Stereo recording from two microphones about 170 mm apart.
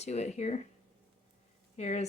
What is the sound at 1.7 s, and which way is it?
Speech, 40° left (ahead or behind).